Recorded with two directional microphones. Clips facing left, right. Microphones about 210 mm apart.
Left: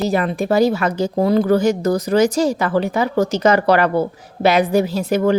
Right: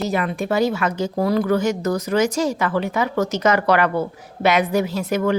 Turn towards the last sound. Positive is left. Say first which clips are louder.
# left 4 dB
turn(degrees=30)  # may be behind; listen again after turning